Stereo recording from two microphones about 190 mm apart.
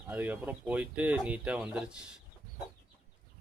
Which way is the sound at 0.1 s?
10° right (ahead or behind).